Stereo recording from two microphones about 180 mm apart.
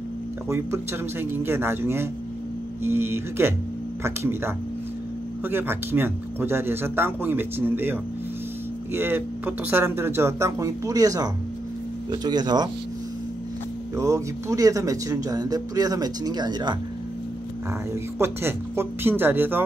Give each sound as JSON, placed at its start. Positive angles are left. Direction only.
{"t": 1.3, "sound": "speech", "side_deg": -15}
{"t": 13.9, "sound": "speech", "side_deg": -15}
{"t": 18.2, "sound": "speech", "side_deg": -15}